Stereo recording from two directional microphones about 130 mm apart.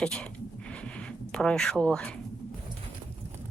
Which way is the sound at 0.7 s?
10° left (ahead or behind).